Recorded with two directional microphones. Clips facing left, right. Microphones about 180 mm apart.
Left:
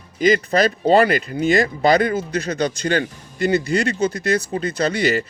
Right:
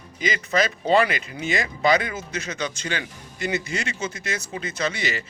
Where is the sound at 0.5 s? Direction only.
40° left (ahead or behind).